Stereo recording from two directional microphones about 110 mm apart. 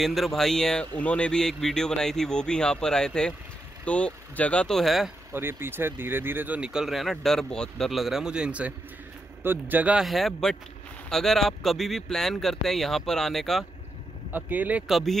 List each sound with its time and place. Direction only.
0.0 s speech: centre (ahead or behind)
5.3 s speech: 20° right (ahead or behind)
10.0 s speech: centre (ahead or behind)
14.3 s speech: 15° right (ahead or behind)
14.9 s speech: centre (ahead or behind)